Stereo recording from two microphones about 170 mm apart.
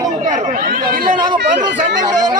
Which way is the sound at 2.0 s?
25° right (ahead or behind).